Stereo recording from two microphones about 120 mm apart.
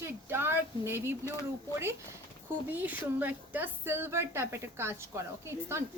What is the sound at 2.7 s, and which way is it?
A woman's voice, 15° right (ahead or behind).